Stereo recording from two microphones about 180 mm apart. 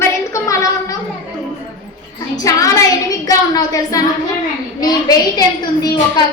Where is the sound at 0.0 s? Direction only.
15° left (ahead or behind).